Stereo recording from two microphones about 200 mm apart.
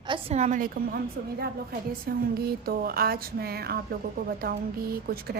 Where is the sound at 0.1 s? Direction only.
30° right (ahead or behind).